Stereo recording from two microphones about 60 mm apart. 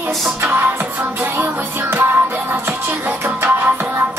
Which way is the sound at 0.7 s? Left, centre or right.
Right.